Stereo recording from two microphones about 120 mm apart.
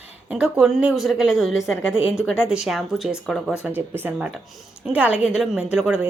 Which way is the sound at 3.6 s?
15° right (ahead or behind).